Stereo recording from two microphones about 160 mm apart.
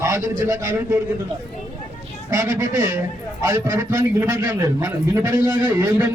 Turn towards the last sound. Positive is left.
turn(degrees=-15)  # may be behind; listen again after turning